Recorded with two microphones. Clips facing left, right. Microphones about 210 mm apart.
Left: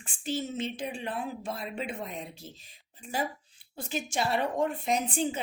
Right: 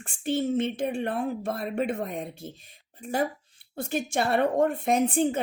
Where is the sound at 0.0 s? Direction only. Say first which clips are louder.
Right 6 dB; 55° right (ahead or behind).